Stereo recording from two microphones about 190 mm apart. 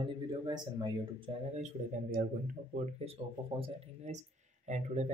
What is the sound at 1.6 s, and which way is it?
A man's voice, 45° right (ahead or behind).